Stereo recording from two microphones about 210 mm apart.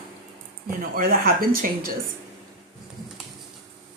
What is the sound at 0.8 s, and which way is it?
Speech, 45° right (ahead or behind).